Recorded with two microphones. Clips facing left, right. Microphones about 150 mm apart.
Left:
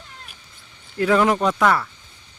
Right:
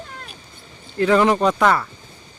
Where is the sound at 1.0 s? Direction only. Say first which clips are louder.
Right 2 dB; 5° left (ahead or behind).